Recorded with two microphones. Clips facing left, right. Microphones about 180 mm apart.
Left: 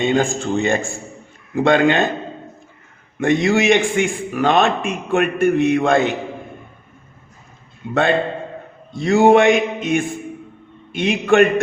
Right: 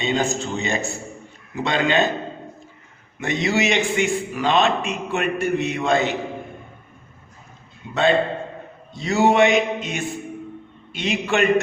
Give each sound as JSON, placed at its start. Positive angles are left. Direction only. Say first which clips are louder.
{"t": 0.0, "sound": "a man's voice", "louder": "left 5 dB", "side_deg": 50}
{"t": 3.2, "sound": "a man's voice", "louder": "left 6 dB", "side_deg": 55}
{"t": 7.8, "sound": "a man's voice", "louder": "left 1 dB", "side_deg": 55}